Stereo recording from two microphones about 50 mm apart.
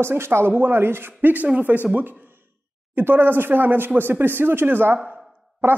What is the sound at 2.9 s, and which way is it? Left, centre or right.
Speech, right.